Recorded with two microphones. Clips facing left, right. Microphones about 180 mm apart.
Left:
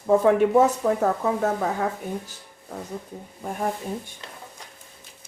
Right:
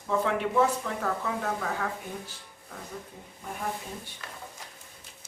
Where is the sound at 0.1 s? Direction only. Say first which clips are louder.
Left 10 dB; 45° left (ahead or behind).